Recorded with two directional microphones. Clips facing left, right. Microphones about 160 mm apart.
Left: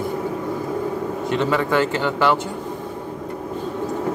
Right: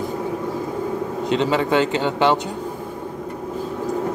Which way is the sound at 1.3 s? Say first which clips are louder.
Right 1 dB; 20° right (ahead or behind).